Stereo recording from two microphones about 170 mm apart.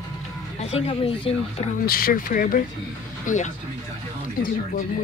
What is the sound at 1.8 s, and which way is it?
Speech, 60° left (ahead or behind).